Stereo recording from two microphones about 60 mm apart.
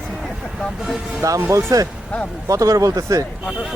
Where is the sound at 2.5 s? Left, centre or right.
Right.